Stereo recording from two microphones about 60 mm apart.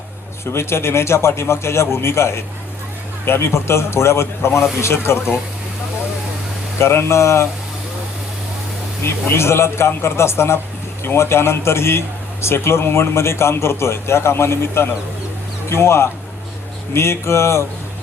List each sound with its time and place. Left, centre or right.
0.5 s a man's voice: left
6.7 s a man's voice: left
9.3 s a man's voice: left